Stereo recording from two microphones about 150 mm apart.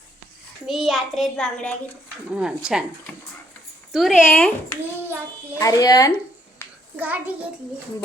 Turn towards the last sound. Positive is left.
turn(degrees=-10)  # may be behind; listen again after turning